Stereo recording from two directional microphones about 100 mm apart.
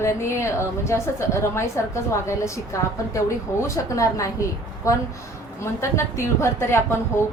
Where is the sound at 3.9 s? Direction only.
30° left (ahead or behind).